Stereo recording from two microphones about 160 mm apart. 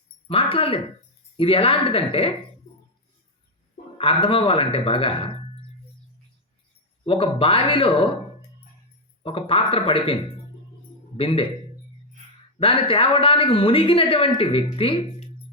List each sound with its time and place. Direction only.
0.3 s speech: 35° left (ahead or behind)
3.9 s speech: 35° left (ahead or behind)
7.0 s speech: 35° left (ahead or behind)
9.2 s speech: 35° left (ahead or behind)
11.2 s speech: 35° left (ahead or behind)
12.5 s speech: 35° left (ahead or behind)